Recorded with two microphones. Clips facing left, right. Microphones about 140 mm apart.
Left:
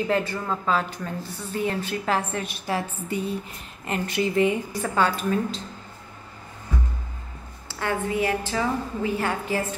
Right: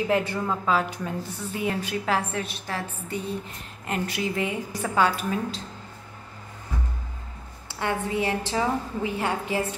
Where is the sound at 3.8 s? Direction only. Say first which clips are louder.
Left 3 dB; centre (ahead or behind).